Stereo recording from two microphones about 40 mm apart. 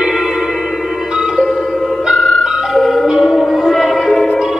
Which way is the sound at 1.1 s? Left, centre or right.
Centre.